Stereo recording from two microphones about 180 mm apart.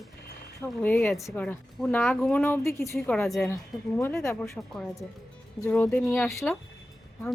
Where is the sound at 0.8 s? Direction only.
10° left (ahead or behind).